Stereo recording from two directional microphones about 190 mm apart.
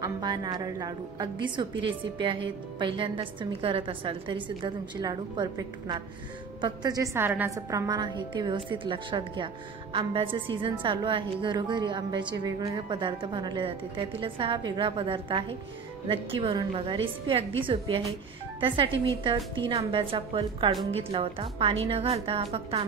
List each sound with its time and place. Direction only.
0.0 s a woman's voice: 20° right (ahead or behind)
19.2 s a woman's voice: 25° right (ahead or behind)